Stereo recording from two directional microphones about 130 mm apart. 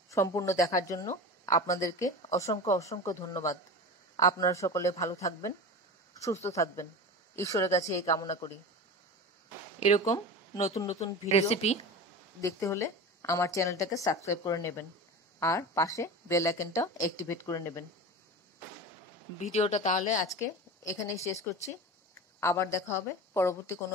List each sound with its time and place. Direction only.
0.1 s a woman's voice: 25° left (ahead or behind)
6.5 s a woman's voice: 25° left (ahead or behind)
9.8 s speech: 60° left (ahead or behind)
10.0 s speech: 30° left (ahead or behind)
10.9 s speech: 55° left (ahead or behind)
12.4 s a woman's voice: 25° left (ahead or behind)
19.5 s speech: 60° left (ahead or behind)
20.2 s a woman's voice: 20° left (ahead or behind)
22.4 s a woman's voice: 20° left (ahead or behind)